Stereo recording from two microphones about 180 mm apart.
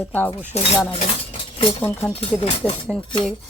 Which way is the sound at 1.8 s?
15° left (ahead or behind).